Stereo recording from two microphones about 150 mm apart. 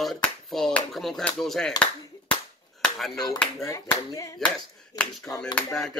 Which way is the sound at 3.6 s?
20° left (ahead or behind).